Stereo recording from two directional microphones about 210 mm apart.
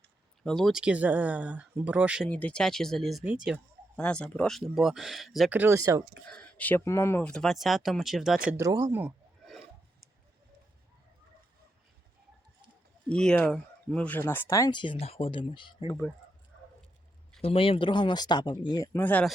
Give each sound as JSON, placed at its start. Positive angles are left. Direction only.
{"t": 0.4, "sound": "speech", "side_deg": 0}
{"t": 2.3, "sound": "speech", "side_deg": 5}
{"t": 6.3, "sound": "speech", "side_deg": 5}
{"t": 8.4, "sound": "a sound", "side_deg": -15}
{"t": 13.1, "sound": "speech", "side_deg": 5}
{"t": 17.4, "sound": "speech", "side_deg": 25}